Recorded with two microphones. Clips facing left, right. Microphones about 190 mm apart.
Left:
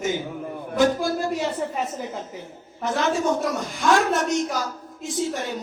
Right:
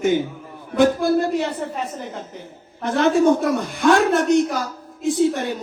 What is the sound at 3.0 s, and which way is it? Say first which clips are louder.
A man's voice: right 8 dB; 60° right (ahead or behind).